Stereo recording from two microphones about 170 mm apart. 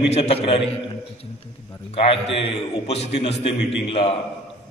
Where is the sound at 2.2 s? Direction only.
35° left (ahead or behind).